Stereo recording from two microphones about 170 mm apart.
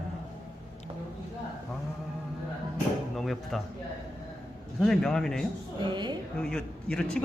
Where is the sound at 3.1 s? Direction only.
Centre (ahead or behind).